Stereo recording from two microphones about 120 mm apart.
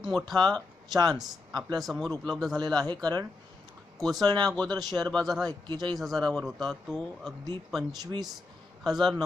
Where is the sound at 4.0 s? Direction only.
Centre (ahead or behind).